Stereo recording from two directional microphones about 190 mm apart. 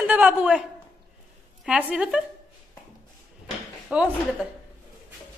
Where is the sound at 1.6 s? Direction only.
5° right (ahead or behind).